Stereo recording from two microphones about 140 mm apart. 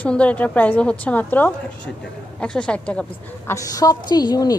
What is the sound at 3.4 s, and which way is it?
Speech, 25° left (ahead or behind).